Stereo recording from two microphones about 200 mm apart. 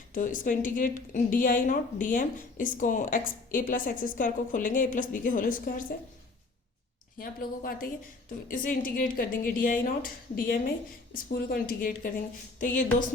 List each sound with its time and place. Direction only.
0.1 s a woman's voice: 40° left (ahead or behind)
7.2 s a woman's voice: 45° left (ahead or behind)